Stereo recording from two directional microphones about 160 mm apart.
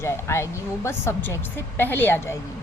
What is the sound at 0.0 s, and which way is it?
A woman's voice, 15° left (ahead or behind).